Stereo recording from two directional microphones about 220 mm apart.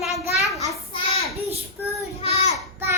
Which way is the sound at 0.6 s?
25° left (ahead or behind).